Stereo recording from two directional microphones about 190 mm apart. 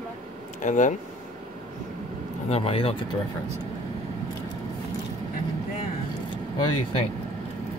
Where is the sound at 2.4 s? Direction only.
30° left (ahead or behind).